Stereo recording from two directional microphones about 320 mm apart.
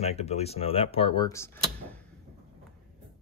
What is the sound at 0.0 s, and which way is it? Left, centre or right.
Speech, centre.